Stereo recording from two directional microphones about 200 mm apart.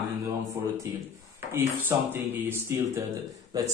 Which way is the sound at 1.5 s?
10° right (ahead or behind).